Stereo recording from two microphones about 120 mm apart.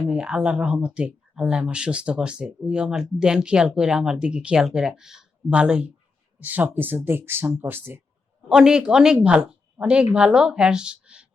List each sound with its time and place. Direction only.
0.1 s speech: 10° right (ahead or behind)
8.4 s a man's voice: 5° right (ahead or behind)